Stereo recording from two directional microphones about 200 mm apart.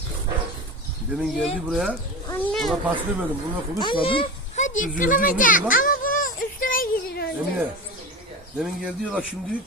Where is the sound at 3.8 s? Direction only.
25° left (ahead or behind); by 7.3 s 50° left (ahead or behind).